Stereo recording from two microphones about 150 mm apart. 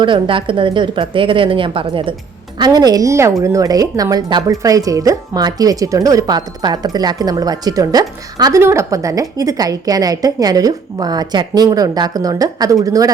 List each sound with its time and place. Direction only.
0.0 s a woman's voice: 35° right (ahead or behind)